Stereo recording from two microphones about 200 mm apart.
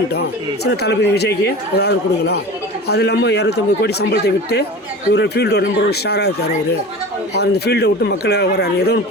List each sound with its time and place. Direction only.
0.1 s speech: 55° left (ahead or behind)